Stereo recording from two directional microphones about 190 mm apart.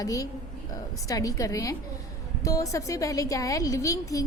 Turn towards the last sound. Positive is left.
turn(degrees=15)  # may be behind; listen again after turning